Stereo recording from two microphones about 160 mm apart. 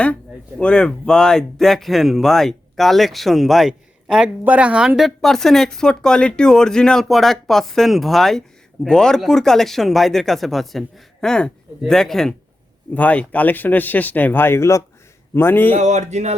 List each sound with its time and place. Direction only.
0.6 s speech: 5° left (ahead or behind)
15.7 s speech: 45° right (ahead or behind)